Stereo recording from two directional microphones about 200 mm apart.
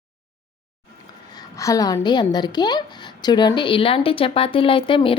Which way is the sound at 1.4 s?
15° left (ahead or behind).